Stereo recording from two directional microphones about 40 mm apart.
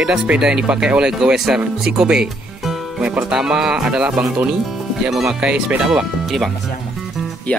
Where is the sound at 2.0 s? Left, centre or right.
Right.